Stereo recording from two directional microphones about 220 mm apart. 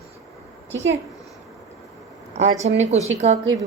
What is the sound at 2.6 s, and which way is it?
Speech, 30° right (ahead or behind).